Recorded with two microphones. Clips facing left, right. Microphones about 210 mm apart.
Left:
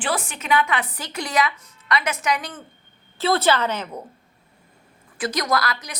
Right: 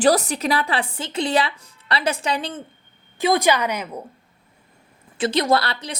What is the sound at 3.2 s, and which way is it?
Speech, 15° right (ahead or behind).